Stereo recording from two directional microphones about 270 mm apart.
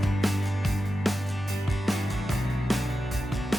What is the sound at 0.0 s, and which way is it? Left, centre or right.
Music, centre.